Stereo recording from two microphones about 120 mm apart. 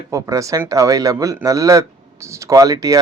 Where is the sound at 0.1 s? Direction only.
30° right (ahead or behind).